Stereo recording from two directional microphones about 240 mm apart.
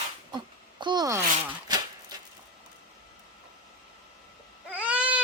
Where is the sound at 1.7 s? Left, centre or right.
Centre.